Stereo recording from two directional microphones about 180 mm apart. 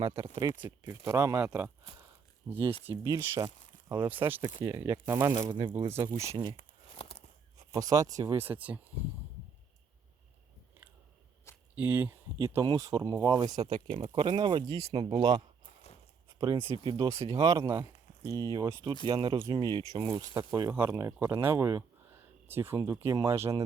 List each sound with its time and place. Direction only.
0.3 s speech: 25° right (ahead or behind)
0.9 s speech: 15° right (ahead or behind)
2.5 s speech: centre (ahead or behind)
2.9 s speech: 20° right (ahead or behind)
4.1 s speech: 10° right (ahead or behind)
6.9 s a sound: 30° left (ahead or behind)
7.7 s speech: 20° right (ahead or behind)
11.7 s speech: 10° right (ahead or behind)
16.6 s speech: 25° right (ahead or behind)